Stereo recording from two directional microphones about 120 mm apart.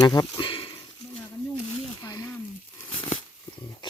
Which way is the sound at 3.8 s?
40° left (ahead or behind).